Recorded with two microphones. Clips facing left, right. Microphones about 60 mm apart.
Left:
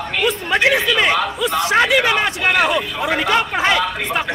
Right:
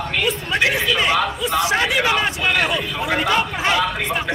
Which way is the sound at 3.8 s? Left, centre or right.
Centre.